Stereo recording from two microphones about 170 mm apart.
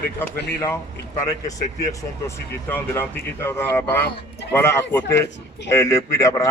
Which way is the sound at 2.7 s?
15° left (ahead or behind).